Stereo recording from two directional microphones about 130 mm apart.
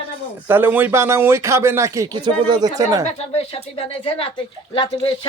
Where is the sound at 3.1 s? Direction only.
50° left (ahead or behind).